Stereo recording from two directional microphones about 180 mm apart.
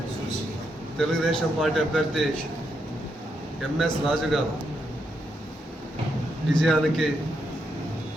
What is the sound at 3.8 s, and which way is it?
Speech, centre (ahead or behind).